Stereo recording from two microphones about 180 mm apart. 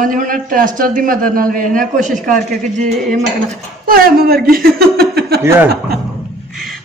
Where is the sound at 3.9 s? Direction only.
55° right (ahead or behind).